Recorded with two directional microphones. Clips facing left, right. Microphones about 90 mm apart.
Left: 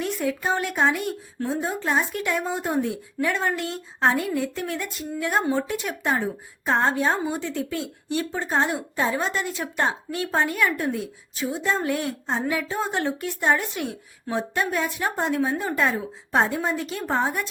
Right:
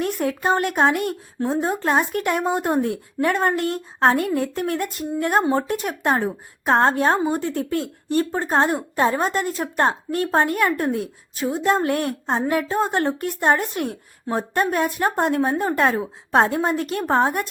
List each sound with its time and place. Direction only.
0.0 s a woman's voice: 55° right (ahead or behind)